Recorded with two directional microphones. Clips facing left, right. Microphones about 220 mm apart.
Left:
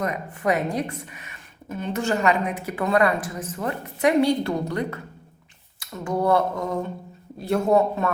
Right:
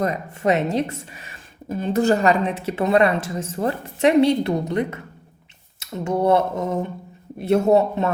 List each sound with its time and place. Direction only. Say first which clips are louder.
0.0 s speech: right 4 dB; 30° right (ahead or behind)